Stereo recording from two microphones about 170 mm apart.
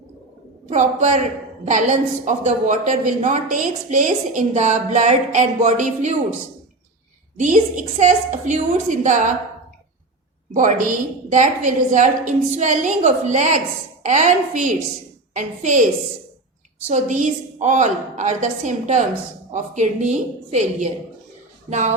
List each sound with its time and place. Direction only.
0.7 s a woman's voice: 45° right (ahead or behind)
7.3 s a woman's voice: 50° right (ahead or behind)
10.5 s a woman's voice: 50° right (ahead or behind)
16.9 s a woman's voice: 45° right (ahead or behind)